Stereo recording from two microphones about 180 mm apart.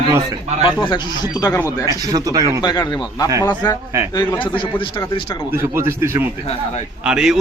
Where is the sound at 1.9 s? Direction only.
20° right (ahead or behind).